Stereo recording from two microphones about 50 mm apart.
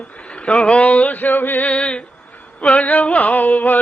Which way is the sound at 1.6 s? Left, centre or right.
Left.